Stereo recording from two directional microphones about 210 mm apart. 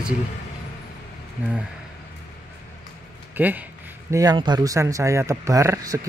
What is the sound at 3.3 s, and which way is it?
Speech, 10° right (ahead or behind).